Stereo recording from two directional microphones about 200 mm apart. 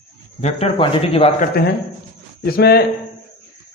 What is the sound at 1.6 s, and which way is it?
Speech, 50° left (ahead or behind).